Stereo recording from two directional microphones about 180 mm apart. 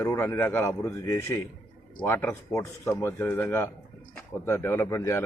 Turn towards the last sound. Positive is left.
turn(degrees=15)  # may be behind; listen again after turning